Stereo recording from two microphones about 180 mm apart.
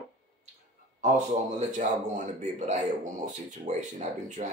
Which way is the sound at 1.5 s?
45° right (ahead or behind).